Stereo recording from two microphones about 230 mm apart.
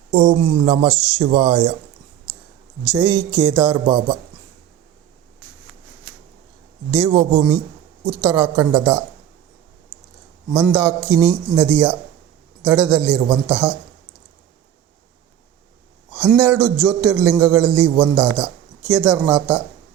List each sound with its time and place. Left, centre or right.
0.1 s speech: right
2.9 s speech: centre
6.9 s speech: centre
10.5 s speech: centre
16.4 s speech: centre